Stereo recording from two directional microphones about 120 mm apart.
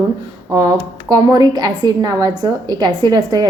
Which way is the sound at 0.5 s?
30° right (ahead or behind).